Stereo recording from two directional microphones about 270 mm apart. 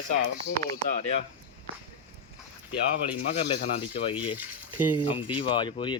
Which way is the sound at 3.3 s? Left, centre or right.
Left.